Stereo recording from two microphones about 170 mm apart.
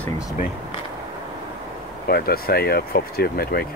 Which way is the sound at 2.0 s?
65° left (ahead or behind).